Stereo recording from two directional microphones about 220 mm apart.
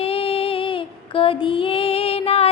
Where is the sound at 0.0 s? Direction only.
25° left (ahead or behind).